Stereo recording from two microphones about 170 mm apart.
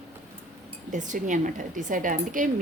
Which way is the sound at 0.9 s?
50° right (ahead or behind).